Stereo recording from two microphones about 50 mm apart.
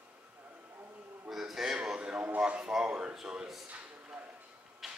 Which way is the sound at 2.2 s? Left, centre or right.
Right.